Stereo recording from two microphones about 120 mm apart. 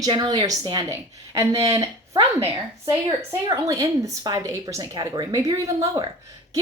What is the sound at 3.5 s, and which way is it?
A woman's voice, 30° right (ahead or behind).